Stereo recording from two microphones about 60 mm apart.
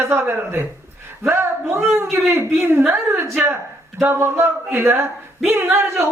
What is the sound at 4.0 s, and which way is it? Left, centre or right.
A woman's voice, right.